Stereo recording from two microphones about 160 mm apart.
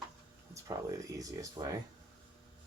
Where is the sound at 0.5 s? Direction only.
20° right (ahead or behind).